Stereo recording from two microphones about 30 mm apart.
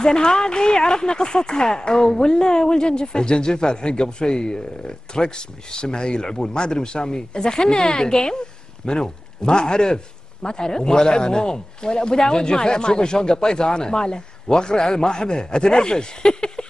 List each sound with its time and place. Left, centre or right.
0.0 s speech: left